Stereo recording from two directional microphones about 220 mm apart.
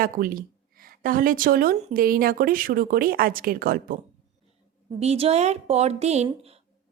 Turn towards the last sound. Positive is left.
turn(degrees=-30)  # may be behind; listen again after turning